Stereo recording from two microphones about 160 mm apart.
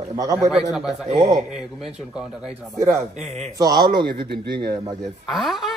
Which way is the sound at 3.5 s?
25° right (ahead or behind).